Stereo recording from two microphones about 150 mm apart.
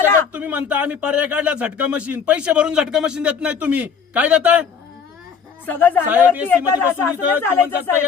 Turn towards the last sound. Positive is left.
turn(degrees=15)  # may be behind; listen again after turning